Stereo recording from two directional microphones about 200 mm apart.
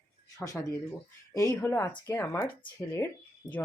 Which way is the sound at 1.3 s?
15° left (ahead or behind).